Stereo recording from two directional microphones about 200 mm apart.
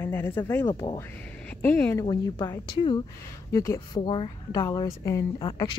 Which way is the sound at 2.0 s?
20° left (ahead or behind).